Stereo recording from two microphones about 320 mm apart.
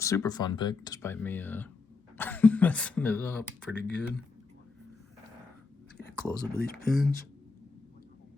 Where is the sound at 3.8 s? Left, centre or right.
Left.